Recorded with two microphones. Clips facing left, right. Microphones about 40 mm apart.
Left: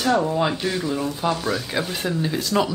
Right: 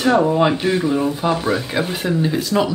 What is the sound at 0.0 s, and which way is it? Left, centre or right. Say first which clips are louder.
Speech: right 5 dB; right.